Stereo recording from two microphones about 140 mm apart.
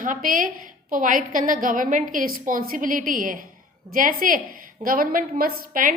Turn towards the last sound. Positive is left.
turn(degrees=-85)